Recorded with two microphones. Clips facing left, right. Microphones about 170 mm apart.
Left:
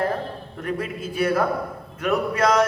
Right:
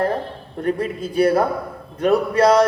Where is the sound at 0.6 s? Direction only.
35° right (ahead or behind).